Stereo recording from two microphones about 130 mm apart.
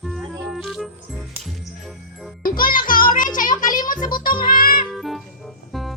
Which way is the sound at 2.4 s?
90° left.